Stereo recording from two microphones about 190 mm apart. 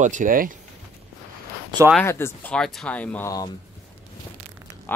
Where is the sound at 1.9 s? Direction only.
15° left (ahead or behind).